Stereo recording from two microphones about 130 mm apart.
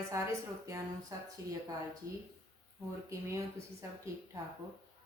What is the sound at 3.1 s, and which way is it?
Speech, 25° right (ahead or behind).